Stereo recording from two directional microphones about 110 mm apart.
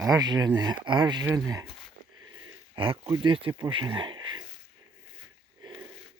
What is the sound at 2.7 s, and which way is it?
Speech, 50° right (ahead or behind).